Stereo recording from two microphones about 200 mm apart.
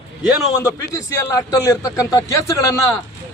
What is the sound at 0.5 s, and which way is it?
A man's voice, 15° left (ahead or behind).